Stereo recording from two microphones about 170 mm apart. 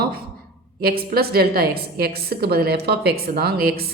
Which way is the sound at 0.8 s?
65° right (ahead or behind).